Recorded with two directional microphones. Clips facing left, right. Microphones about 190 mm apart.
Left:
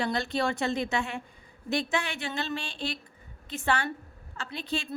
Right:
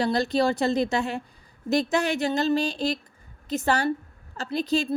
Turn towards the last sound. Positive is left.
turn(degrees=-40)  # may be behind; listen again after turning